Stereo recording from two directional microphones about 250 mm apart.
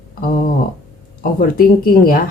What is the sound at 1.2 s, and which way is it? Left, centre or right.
Speech, left.